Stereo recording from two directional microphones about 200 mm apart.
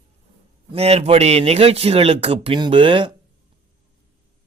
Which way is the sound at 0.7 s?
30° right (ahead or behind).